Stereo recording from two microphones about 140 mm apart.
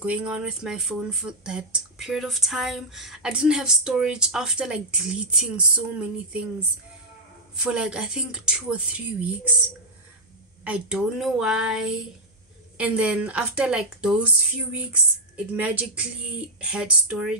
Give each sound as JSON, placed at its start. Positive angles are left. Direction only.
{"t": 0.0, "sound": "speech", "side_deg": -10}
{"t": 10.6, "sound": "speech", "side_deg": -10}